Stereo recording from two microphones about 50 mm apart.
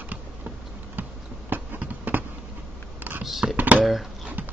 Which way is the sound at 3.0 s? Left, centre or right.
Right.